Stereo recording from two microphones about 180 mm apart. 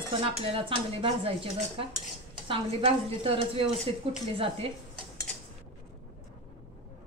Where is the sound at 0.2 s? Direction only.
30° right (ahead or behind).